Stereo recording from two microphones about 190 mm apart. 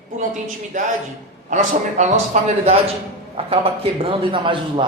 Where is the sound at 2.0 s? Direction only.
35° right (ahead or behind).